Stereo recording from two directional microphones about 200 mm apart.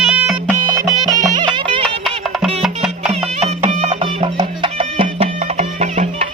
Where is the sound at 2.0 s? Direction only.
Centre (ahead or behind).